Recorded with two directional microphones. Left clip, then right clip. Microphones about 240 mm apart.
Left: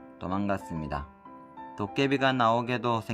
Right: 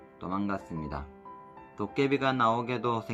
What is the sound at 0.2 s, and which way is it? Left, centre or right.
Speech, left.